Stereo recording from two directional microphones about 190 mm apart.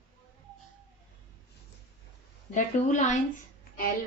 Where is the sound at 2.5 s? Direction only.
40° left (ahead or behind).